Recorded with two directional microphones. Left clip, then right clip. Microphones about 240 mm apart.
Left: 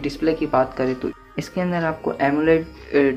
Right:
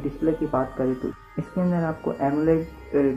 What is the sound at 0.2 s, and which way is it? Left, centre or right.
Speech, left.